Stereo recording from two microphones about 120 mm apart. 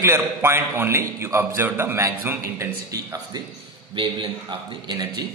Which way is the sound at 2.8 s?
25° right (ahead or behind).